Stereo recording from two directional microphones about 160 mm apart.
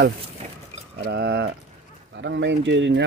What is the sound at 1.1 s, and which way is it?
Speech, 90° right.